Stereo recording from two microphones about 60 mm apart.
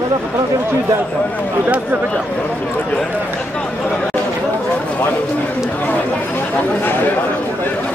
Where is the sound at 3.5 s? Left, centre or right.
Centre.